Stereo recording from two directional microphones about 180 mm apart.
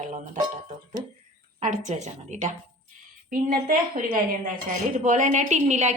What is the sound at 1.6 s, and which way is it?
A woman's voice, 45° right (ahead or behind).